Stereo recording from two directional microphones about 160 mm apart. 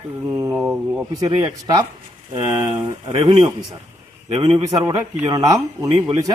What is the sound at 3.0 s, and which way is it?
Speech, 35° right (ahead or behind).